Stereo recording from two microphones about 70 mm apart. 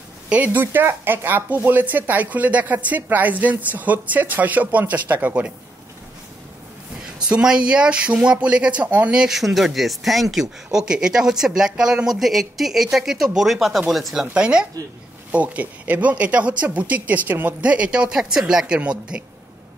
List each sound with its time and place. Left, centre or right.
0.3 s speech: right
7.2 s speech: centre
14.3 s speech: centre